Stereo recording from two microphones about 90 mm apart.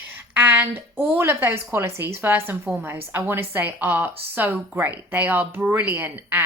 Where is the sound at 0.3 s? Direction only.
20° right (ahead or behind).